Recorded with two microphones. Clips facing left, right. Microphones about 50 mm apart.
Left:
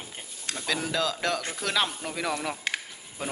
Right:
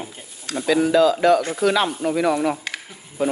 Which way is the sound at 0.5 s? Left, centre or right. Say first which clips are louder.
Right 12 dB; centre.